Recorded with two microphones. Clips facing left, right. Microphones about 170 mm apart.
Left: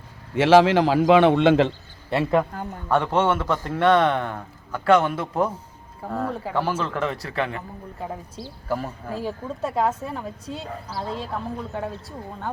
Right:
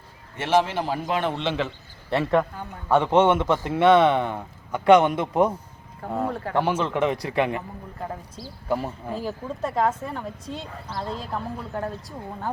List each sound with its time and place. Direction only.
0.3 s a man's voice: 90° left; by 1.5 s 60° left (ahead or behind)
2.0 s speech: centre (ahead or behind)
2.9 s a man's voice: 10° right (ahead or behind)
6.3 s speech: 5° left (ahead or behind)
6.6 s a man's voice: 10° right (ahead or behind)
9.1 s speech: 5° left (ahead or behind)